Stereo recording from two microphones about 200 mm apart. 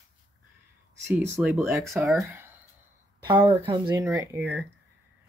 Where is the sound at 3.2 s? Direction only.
25° right (ahead or behind).